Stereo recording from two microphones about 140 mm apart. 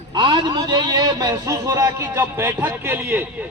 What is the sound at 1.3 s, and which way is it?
A man's voice, 20° right (ahead or behind).